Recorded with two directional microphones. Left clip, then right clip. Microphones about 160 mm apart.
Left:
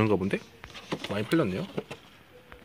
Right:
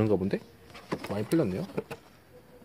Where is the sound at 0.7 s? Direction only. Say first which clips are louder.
Left 1 dB; 20° right (ahead or behind).